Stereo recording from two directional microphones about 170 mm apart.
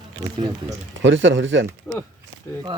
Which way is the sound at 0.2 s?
25° right (ahead or behind).